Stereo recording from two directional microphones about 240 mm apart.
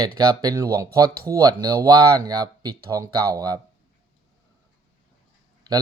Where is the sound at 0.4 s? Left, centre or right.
Centre.